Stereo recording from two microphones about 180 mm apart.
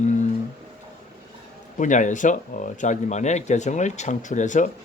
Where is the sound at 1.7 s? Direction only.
45° left (ahead or behind).